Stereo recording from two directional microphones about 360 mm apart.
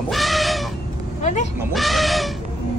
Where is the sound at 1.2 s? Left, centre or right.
Centre.